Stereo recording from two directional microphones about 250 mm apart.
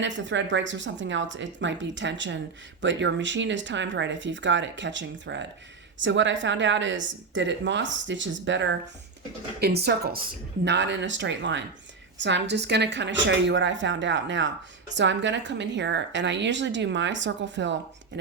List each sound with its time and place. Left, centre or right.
0.0 s speech: right